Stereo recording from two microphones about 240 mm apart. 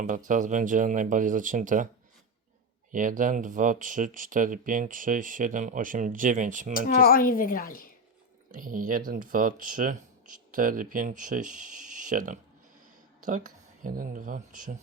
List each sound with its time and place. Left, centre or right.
0.3 s speech: right
2.9 s speech: right
6.7 s speech: left
8.5 s speech: right